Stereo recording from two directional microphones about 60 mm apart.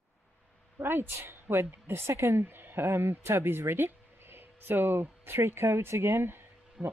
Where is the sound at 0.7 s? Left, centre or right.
Right.